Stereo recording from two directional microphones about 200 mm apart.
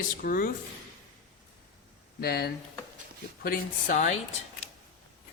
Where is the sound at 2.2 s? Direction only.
50° left (ahead or behind).